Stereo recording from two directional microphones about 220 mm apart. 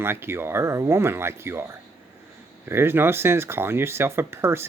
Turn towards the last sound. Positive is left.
turn(degrees=-10)  # may be behind; listen again after turning